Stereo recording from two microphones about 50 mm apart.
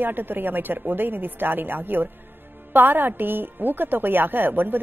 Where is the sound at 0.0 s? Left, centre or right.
Right.